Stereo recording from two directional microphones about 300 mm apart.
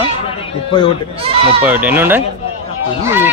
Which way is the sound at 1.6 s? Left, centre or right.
Centre.